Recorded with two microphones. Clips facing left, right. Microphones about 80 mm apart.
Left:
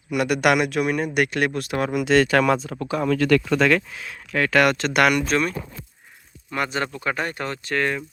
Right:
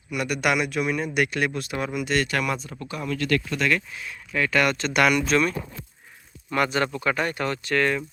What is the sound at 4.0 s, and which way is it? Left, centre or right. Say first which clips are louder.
Speech: left 3 dB; left.